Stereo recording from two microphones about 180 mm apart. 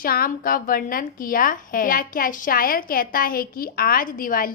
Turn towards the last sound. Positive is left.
turn(degrees=50)  # may be behind; listen again after turning